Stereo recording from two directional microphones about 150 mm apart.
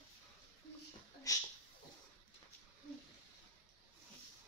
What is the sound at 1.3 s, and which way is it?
Speech, 20° left (ahead or behind).